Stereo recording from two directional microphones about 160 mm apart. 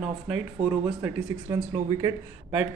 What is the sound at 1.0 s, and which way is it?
Speech, 20° right (ahead or behind).